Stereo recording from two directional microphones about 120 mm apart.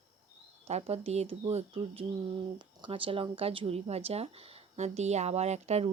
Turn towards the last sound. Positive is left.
turn(degrees=-65)  # may be behind; listen again after turning